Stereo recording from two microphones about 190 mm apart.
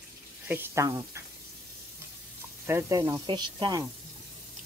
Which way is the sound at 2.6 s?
15° right (ahead or behind).